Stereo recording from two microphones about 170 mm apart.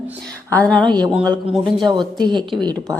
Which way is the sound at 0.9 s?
25° right (ahead or behind).